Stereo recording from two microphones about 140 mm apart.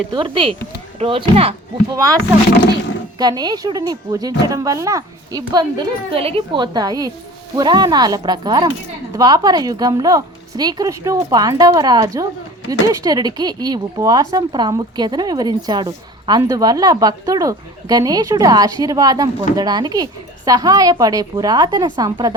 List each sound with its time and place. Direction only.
0.1 s speech: 35° right (ahead or behind)
3.2 s speech: 30° right (ahead or behind)